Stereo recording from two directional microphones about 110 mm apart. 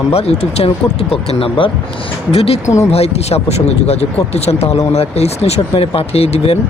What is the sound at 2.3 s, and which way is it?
Speech, 65° left (ahead or behind).